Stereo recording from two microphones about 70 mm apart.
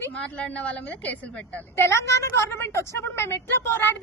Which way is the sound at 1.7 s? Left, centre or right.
Left.